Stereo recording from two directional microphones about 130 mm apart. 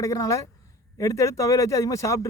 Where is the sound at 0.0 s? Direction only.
25° left (ahead or behind).